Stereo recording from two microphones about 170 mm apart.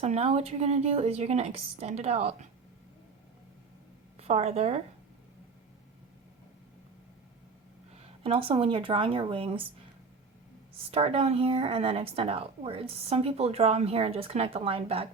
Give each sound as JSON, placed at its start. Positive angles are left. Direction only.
{"t": 0.0, "sound": "a woman's voice", "side_deg": -40}
{"t": 4.2, "sound": "a woman's voice", "side_deg": -40}
{"t": 8.2, "sound": "a woman's voice", "side_deg": -35}
{"t": 10.9, "sound": "a woman's voice", "side_deg": -35}